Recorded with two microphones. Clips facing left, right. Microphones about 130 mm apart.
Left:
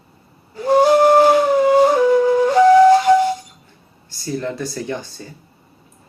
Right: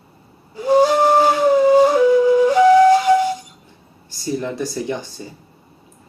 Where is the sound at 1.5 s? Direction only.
15° right (ahead or behind).